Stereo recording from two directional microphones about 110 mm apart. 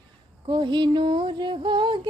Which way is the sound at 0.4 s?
45° right (ahead or behind).